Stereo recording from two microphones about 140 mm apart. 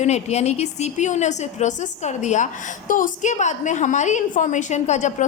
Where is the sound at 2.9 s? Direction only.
70° left (ahead or behind); by 5.3 s 55° left (ahead or behind).